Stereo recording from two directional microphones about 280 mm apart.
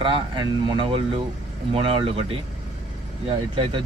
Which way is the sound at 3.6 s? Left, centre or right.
Centre.